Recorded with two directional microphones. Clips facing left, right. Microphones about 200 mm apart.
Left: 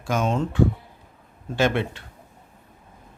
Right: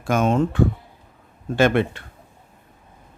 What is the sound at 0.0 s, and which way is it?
Speech, 55° right (ahead or behind).